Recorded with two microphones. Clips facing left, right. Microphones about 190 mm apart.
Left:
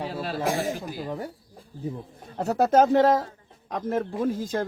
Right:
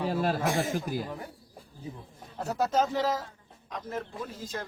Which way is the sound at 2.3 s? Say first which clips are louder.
Left 7 dB; 60° left (ahead or behind).